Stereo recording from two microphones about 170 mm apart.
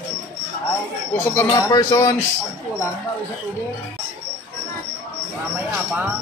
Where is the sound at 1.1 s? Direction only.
15° left (ahead or behind).